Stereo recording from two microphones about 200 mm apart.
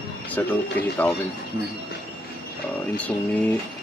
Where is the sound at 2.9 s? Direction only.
10° left (ahead or behind).